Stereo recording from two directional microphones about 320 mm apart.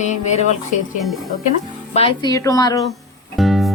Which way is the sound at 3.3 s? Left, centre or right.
Centre.